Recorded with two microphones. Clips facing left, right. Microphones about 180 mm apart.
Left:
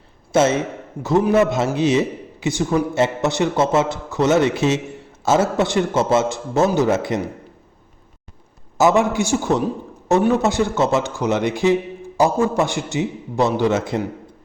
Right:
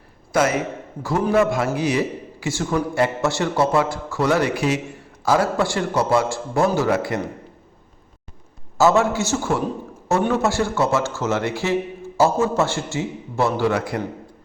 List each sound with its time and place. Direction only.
0.3 s a man's voice: 25° left (ahead or behind)
1.0 s a man's voice: 10° left (ahead or behind)
1.3 s a man's voice: 20° left (ahead or behind)
8.8 s a man's voice: 15° left (ahead or behind)